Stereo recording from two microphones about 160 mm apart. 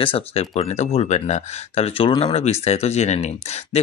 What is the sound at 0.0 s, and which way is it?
Speech, 35° left (ahead or behind).